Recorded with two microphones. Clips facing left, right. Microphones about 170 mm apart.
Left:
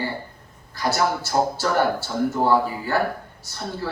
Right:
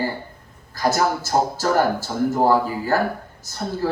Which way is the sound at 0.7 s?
40° right (ahead or behind).